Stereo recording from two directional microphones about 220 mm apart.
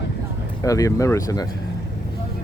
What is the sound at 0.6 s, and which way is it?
Speech, 15° left (ahead or behind).